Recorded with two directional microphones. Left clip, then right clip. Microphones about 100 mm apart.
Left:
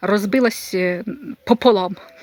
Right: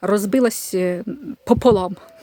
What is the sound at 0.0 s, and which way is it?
Speech, 25° right (ahead or behind).